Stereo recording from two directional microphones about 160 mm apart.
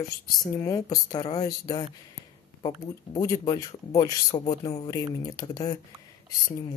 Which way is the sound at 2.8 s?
20° left (ahead or behind).